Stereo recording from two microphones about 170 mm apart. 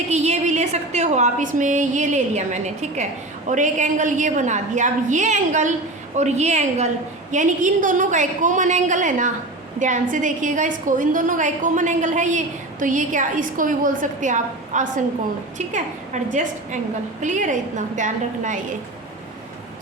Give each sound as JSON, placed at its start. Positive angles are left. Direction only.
{"t": 0.1, "sound": "a woman's voice", "side_deg": -40}